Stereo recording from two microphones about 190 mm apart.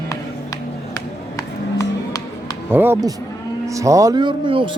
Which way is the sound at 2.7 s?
10° right (ahead or behind).